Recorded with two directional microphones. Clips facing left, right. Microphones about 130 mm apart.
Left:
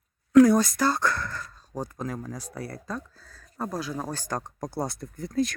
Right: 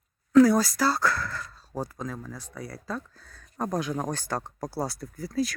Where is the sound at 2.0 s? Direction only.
10° left (ahead or behind).